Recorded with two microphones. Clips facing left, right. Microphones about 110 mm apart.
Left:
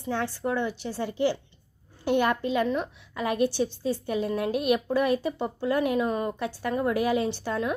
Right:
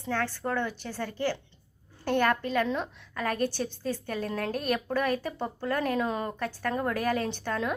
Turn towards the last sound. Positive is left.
turn(degrees=5)  # may be behind; listen again after turning